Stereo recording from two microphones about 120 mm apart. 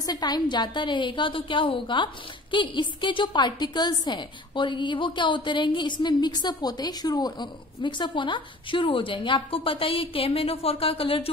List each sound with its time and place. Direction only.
0.0 s a woman's voice: 35° left (ahead or behind); by 11.2 s 50° left (ahead or behind)